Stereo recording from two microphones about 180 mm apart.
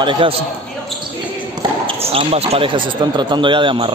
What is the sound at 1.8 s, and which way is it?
Speech, 30° right (ahead or behind).